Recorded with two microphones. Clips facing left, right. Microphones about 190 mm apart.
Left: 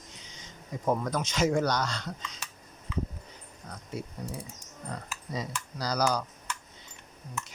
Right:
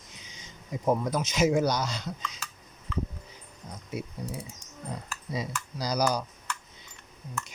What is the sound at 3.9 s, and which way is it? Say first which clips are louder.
Speech: right 2 dB; 10° right (ahead or behind).